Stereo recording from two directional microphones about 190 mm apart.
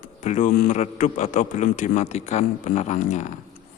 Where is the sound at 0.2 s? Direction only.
40° left (ahead or behind).